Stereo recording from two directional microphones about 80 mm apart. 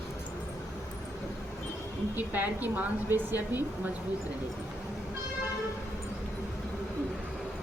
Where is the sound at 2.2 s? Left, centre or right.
Right.